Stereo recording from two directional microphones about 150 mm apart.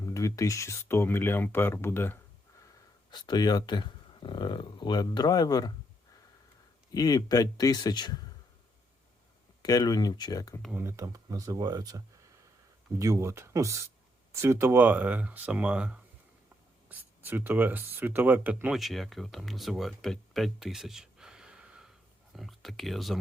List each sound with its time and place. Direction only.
0.0 s speech: 20° left (ahead or behind)
3.1 s speech: 30° left (ahead or behind)
6.9 s speech: 25° left (ahead or behind)
9.6 s speech: 25° left (ahead or behind)
10.7 s speech: 15° right (ahead or behind)
18.8 s speech: centre (ahead or behind)